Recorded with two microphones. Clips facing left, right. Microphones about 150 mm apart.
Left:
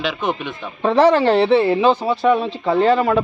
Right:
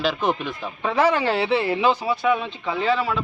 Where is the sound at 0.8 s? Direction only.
35° left (ahead or behind).